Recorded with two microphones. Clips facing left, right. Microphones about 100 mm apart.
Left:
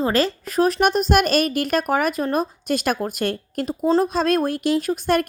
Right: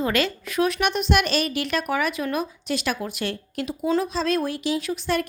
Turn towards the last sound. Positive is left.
turn(degrees=50)  # may be behind; listen again after turning